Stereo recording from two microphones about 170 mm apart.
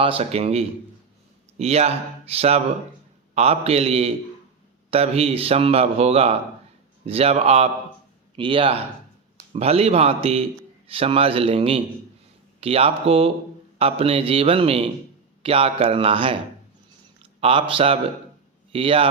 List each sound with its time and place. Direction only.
0.0 s speech: 35° right (ahead or behind)
17.4 s speech: 35° right (ahead or behind)